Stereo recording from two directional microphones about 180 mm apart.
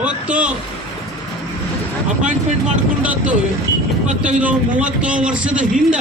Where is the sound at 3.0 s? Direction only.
10° right (ahead or behind).